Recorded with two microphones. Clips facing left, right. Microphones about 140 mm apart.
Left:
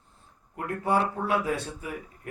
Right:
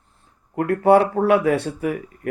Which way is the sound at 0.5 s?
70° right (ahead or behind).